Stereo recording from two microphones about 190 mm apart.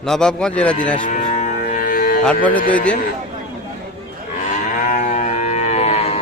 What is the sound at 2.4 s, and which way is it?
Speech, 45° left (ahead or behind).